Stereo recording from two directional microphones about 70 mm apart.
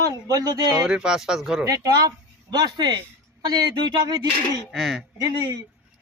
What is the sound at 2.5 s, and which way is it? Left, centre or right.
Speech, right.